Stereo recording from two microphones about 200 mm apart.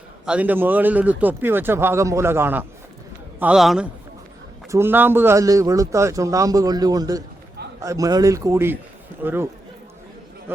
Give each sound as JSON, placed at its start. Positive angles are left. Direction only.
{"t": 0.3, "sound": "a man's voice", "side_deg": -5}